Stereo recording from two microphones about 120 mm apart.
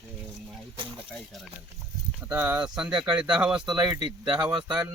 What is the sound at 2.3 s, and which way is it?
Speech, 25° right (ahead or behind).